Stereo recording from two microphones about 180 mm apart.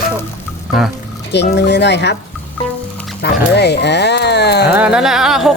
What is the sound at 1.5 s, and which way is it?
Speech, 70° left (ahead or behind).